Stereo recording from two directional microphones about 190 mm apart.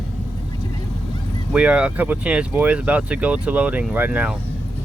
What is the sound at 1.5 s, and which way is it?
Speech, 5° right (ahead or behind).